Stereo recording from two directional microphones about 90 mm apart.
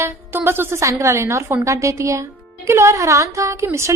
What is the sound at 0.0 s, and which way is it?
Speech, 25° right (ahead or behind).